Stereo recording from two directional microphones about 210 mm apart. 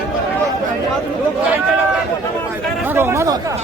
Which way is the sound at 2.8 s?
10° right (ahead or behind).